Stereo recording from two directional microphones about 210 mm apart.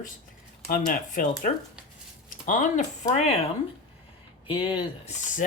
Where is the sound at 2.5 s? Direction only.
35° left (ahead or behind).